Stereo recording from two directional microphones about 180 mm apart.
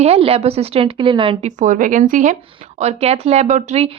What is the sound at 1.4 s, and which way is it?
Speech, 45° right (ahead or behind).